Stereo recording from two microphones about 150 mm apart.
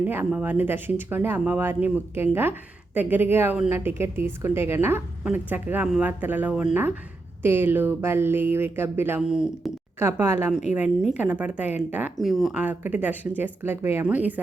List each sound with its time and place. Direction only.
0.0 s speech: 10° right (ahead or behind)
10.0 s speech: 15° right (ahead or behind)
10.8 s a woman's voice: 55° left (ahead or behind)
11.2 s speech: 10° right (ahead or behind)
12.1 s speech: centre (ahead or behind)